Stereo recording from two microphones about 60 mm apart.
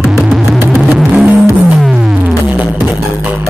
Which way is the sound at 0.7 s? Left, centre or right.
Centre.